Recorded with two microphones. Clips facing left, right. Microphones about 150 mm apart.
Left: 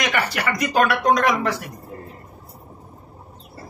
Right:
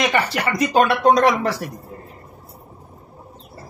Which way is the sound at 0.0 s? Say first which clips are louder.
Right 3 dB; 25° right (ahead or behind).